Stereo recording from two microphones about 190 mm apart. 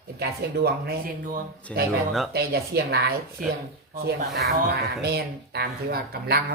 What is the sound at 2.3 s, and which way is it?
Speech, 55° right (ahead or behind).